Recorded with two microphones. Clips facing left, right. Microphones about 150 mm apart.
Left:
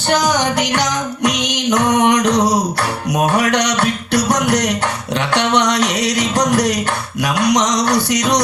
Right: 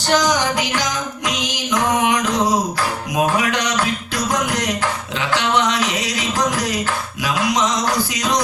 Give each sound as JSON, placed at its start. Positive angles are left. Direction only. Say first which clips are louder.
{"t": 0.3, "sound": "music", "louder": "left 4 dB", "side_deg": 70}